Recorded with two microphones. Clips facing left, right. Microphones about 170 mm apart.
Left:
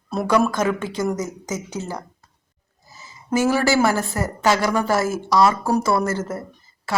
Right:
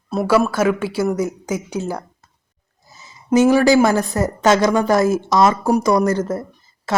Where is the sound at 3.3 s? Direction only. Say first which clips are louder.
Right 6 dB; 15° right (ahead or behind).